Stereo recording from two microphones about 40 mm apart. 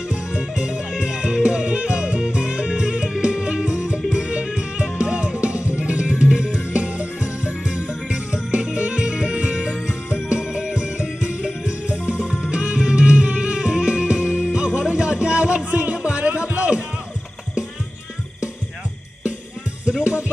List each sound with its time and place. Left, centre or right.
0.1 s music: right
19.8 s music: right